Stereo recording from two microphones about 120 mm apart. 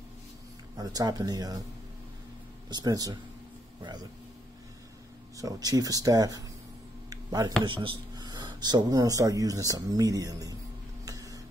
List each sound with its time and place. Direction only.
0.7 s speech: 30° right (ahead or behind)
2.7 s speech: 30° right (ahead or behind)
5.4 s speech: 30° right (ahead or behind)
7.1 s a sound: 30° right (ahead or behind)
7.6 s speech: 45° right (ahead or behind)
11.1 s a sound: 30° right (ahead or behind)